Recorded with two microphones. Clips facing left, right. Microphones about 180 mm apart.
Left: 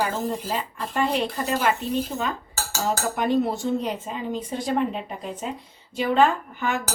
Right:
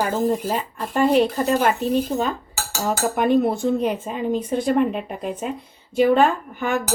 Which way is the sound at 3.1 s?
55° right (ahead or behind).